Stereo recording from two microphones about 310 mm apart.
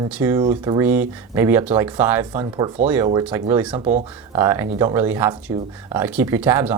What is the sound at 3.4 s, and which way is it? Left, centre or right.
Speech, centre.